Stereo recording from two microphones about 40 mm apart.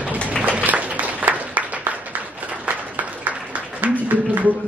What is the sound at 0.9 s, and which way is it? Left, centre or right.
Applause, right.